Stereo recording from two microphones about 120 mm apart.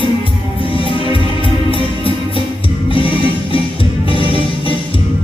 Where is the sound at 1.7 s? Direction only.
45° left (ahead or behind).